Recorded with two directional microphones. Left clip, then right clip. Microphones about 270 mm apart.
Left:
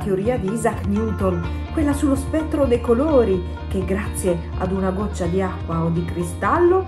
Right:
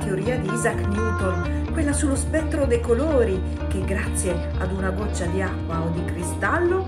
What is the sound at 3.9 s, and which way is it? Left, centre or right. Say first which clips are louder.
A woman's voice: left 5 dB; centre.